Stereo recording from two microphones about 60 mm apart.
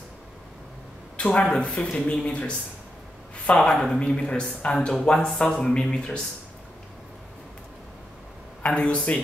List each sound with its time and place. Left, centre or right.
1.1 s a sound: centre
1.5 s speech: centre
3.6 s speech: centre
8.6 s speech: centre